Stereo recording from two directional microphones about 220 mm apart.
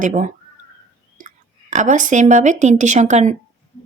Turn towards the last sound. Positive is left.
turn(degrees=-30)  # may be behind; listen again after turning